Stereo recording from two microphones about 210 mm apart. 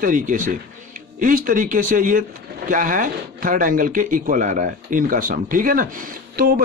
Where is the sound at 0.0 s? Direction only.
40° right (ahead or behind).